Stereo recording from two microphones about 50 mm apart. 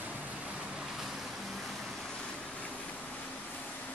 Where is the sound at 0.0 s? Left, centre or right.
Right.